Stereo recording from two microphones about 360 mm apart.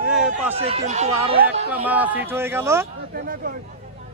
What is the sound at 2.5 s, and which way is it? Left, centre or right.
Speech, centre.